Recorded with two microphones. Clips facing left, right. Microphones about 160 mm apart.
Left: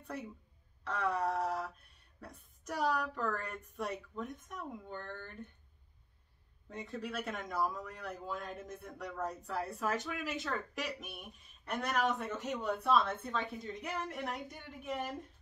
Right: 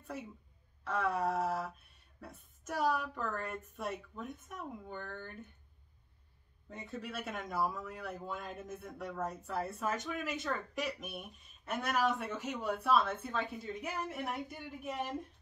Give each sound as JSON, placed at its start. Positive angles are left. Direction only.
{"t": 0.8, "sound": "speech", "side_deg": -5}
{"t": 6.7, "sound": "speech", "side_deg": 0}